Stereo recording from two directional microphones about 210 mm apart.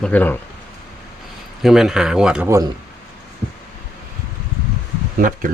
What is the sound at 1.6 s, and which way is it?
Speech, centre (ahead or behind).